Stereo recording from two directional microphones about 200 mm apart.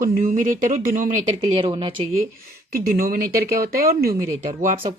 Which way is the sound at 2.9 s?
45° right (ahead or behind).